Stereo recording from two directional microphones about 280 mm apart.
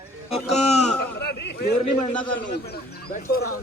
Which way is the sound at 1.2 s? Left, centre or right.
Left.